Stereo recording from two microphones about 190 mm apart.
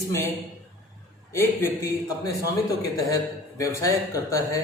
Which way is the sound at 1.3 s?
15° left (ahead or behind).